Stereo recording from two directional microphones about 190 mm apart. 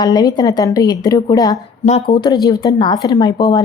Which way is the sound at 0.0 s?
20° left (ahead or behind).